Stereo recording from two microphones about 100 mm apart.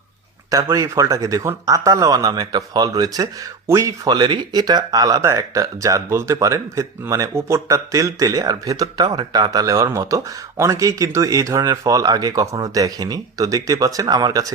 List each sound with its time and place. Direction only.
0.5 s speech: 35° right (ahead or behind)
4.1 s speech: 45° right (ahead or behind)